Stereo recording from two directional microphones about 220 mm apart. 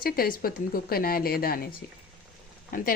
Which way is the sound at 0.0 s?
40° left (ahead or behind).